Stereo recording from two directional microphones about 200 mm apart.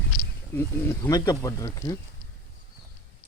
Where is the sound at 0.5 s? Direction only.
10° left (ahead or behind).